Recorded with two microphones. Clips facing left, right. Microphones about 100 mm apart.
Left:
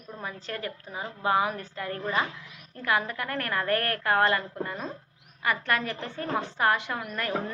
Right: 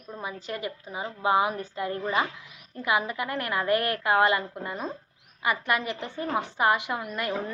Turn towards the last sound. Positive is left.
turn(degrees=-15)  # may be behind; listen again after turning